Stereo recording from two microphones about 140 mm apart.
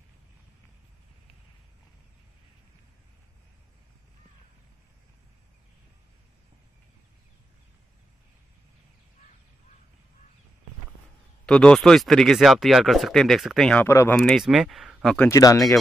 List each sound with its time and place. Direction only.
11.4 s speech: 5° left (ahead or behind)
13.8 s speech: 20° left (ahead or behind)
14.1 s speech: centre (ahead or behind)
15.3 s speech: 25° left (ahead or behind)